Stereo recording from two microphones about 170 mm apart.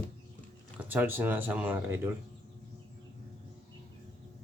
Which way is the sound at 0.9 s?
10° right (ahead or behind).